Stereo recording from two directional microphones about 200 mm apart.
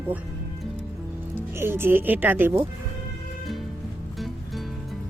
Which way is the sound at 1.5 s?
10° right (ahead or behind).